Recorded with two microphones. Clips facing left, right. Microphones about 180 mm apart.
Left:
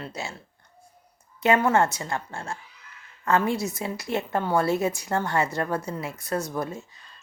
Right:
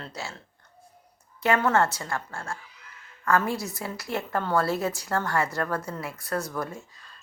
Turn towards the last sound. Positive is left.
turn(degrees=20)  # may be behind; listen again after turning